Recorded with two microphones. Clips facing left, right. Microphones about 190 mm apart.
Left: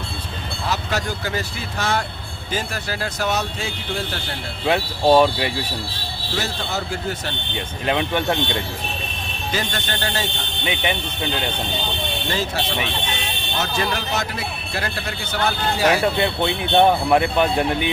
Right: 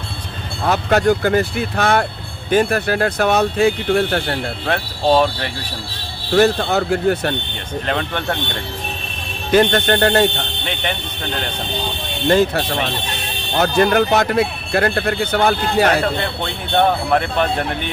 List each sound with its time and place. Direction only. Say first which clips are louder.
0.6 s speech: right 10 dB; 55° right (ahead or behind)
4.6 s speech: left 2 dB; 10° left (ahead or behind)
6.3 s speech: right 12 dB; 60° right (ahead or behind)
7.9 s speech: left 2 dB; 10° left (ahead or behind)
9.5 s speech: right 13 dB; 60° right (ahead or behind)
10.7 s speech: left 2 dB; 10° left (ahead or behind)
12.3 s speech: right 11 dB; 55° right (ahead or behind)
16.2 s speech: left 3 dB; 15° left (ahead or behind)